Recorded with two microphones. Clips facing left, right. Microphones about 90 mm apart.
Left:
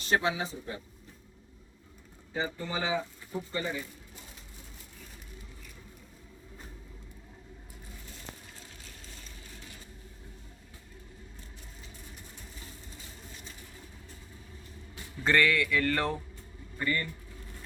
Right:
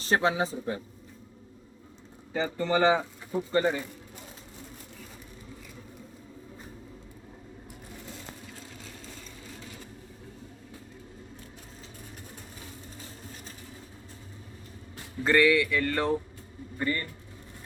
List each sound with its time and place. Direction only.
0.0 s speech: 35° right (ahead or behind)
2.3 s speech: 80° right
3.5 s speech: 55° right (ahead or behind)
15.2 s speech: 5° right (ahead or behind)
16.7 s speech: 20° right (ahead or behind)